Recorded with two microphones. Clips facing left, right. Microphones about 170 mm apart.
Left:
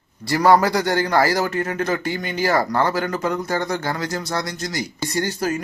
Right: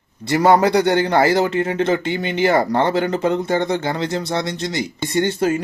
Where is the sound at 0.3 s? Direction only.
20° right (ahead or behind).